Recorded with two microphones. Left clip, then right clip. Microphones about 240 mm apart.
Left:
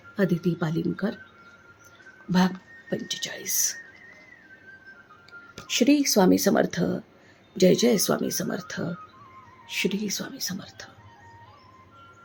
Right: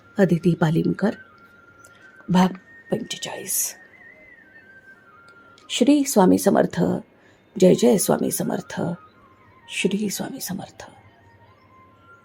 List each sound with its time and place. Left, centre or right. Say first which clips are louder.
0.2 s speech: right 6 dB; right
2.9 s speech: right 3 dB; centre
5.6 s speech: right 3 dB; centre